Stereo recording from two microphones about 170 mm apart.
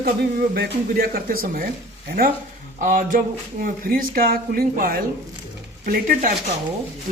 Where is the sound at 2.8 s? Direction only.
50° right (ahead or behind).